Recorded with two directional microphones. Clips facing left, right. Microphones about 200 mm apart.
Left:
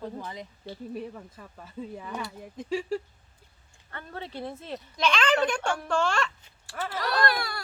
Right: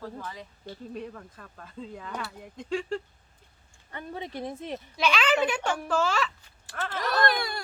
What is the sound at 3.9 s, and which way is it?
A woman's voice, 15° right (ahead or behind).